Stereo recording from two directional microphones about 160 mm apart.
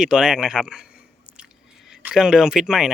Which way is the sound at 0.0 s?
5° right (ahead or behind).